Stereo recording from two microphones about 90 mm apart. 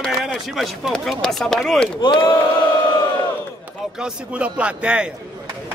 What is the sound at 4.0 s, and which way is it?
A man's voice, 15° right (ahead or behind).